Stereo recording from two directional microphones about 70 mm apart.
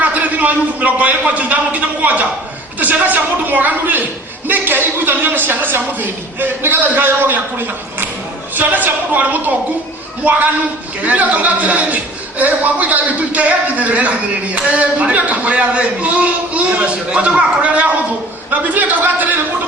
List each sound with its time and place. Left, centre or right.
0.0 s a man's voice: right
8.5 s a man's voice: right
11.0 s a man's voice: right